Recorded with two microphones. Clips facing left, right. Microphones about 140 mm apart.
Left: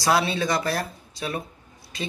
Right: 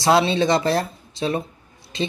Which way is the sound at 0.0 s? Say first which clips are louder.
Right 5 dB; 25° right (ahead or behind).